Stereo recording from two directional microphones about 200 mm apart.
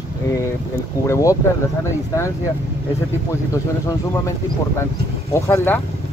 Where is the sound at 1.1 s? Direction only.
15° left (ahead or behind).